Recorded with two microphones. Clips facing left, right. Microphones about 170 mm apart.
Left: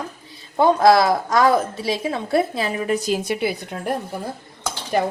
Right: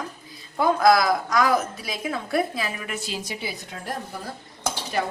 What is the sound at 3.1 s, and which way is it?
Speech, 60° left (ahead or behind).